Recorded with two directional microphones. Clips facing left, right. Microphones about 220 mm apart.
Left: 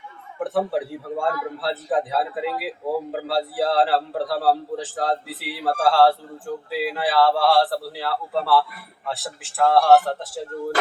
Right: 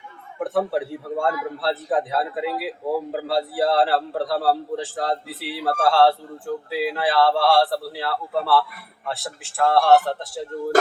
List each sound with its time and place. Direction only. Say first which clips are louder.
0.3 s a man's voice: right 1 dB; centre (ahead or behind)